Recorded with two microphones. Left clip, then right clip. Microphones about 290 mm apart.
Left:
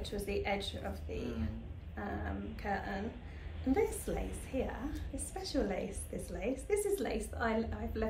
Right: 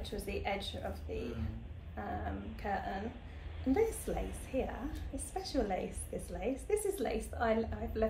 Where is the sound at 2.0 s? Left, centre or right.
Centre.